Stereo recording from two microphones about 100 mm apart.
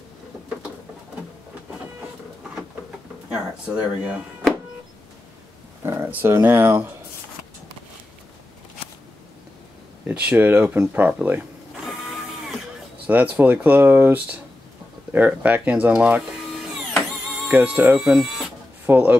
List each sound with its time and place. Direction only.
3.3 s speech: 10° right (ahead or behind)
5.9 s speech: 20° right (ahead or behind)
10.0 s speech: 15° right (ahead or behind)
11.8 s printer: centre (ahead or behind)
13.0 s speech: 15° right (ahead or behind)
16.3 s printer: centre (ahead or behind)
17.4 s speech: 15° right (ahead or behind)
17.9 s speech: 5° right (ahead or behind)
18.9 s speech: 15° right (ahead or behind)